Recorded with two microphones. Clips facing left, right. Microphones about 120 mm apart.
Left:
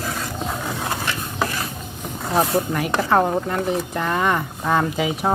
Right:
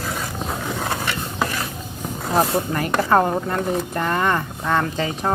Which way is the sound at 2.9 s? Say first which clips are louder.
Right 1 dB; centre (ahead or behind).